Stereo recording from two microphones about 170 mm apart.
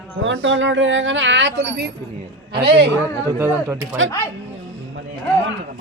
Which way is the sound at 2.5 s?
75° right (ahead or behind).